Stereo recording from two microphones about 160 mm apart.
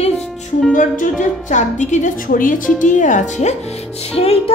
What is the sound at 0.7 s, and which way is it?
A woman's voice, 55° left (ahead or behind).